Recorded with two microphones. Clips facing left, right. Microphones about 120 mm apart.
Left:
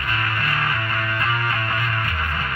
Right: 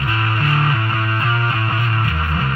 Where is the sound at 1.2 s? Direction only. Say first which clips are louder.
Right 3 dB; 25° right (ahead or behind).